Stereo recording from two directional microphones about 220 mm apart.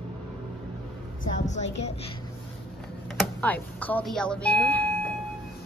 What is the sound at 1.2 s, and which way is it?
Speech, 35° left (ahead or behind).